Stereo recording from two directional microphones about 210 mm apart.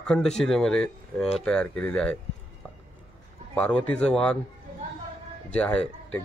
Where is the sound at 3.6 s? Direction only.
5° left (ahead or behind).